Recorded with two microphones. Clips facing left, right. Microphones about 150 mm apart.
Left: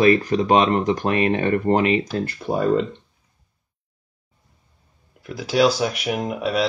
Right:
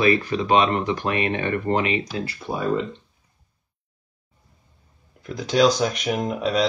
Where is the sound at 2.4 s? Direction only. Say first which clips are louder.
Left 5 dB; 65° left (ahead or behind).